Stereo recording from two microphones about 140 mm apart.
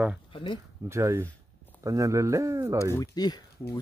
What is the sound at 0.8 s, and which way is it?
Speech, 20° right (ahead or behind).